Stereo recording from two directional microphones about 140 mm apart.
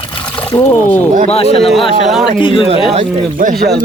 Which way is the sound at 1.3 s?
45° left (ahead or behind).